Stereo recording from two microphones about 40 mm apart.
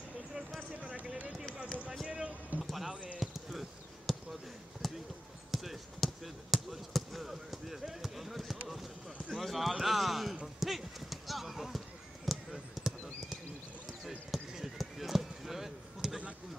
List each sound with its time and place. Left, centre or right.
2.0 s a sound: right
2.6 s clip-clop: centre
3.2 s basketball bounce: centre
9.3 s clip-clop: centre
10.4 s horse: centre
12.3 s basketball bounce: centre
14.0 s basketball bounce: centre